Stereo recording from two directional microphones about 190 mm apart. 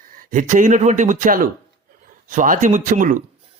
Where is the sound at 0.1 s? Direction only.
45° right (ahead or behind).